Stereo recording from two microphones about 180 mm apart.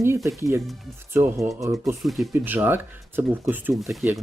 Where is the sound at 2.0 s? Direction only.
Centre (ahead or behind).